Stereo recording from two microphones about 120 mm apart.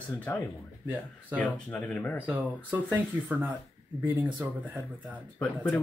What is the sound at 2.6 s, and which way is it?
Speech, 15° right (ahead or behind).